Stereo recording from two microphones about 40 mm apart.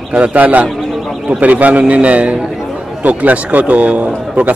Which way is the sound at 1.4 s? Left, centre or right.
Right.